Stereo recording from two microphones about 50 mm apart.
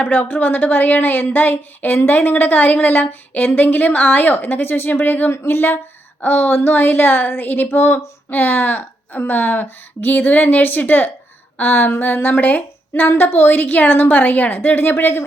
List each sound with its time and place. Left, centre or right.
0.0 s a woman's voice: left
5.3 s a woman's voice: left